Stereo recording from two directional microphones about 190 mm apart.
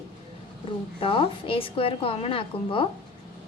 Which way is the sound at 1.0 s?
30° left (ahead or behind).